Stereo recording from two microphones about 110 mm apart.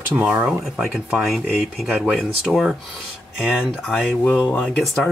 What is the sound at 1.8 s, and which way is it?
Speech, 10° right (ahead or behind).